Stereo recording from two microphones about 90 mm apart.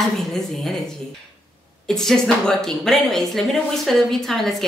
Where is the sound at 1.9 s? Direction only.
5° left (ahead or behind).